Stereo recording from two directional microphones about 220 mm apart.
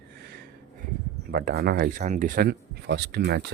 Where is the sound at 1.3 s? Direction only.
45° right (ahead or behind).